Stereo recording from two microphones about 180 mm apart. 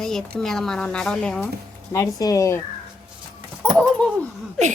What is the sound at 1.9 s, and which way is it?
Speech, 20° left (ahead or behind).